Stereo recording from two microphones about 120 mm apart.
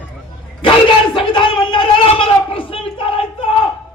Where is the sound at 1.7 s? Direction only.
45° left (ahead or behind).